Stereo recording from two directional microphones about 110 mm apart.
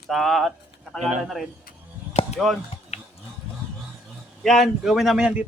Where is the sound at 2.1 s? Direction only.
75° left (ahead or behind).